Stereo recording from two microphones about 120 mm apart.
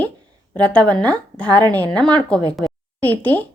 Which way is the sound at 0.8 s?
35° right (ahead or behind).